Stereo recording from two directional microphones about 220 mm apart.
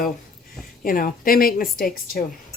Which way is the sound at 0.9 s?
40° left (ahead or behind).